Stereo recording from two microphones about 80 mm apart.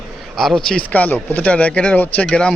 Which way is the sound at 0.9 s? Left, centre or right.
Left.